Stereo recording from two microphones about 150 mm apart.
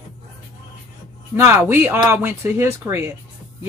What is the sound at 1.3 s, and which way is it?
Speech, 15° right (ahead or behind).